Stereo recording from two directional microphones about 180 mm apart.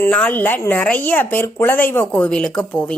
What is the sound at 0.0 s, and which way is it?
A woman's voice, 10° left (ahead or behind).